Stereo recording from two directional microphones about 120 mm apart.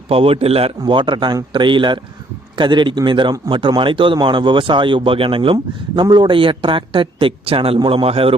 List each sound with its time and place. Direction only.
0.1 s a man's voice: 55° right (ahead or behind)
0.8 s a man's voice: 40° right (ahead or behind)